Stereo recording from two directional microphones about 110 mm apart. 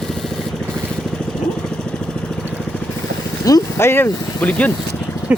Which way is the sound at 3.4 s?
30° left (ahead or behind).